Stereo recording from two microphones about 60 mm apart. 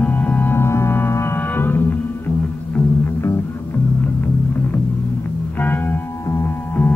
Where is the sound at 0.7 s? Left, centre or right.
Left.